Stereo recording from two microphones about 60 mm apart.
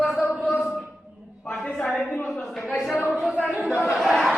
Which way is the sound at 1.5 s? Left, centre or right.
Centre.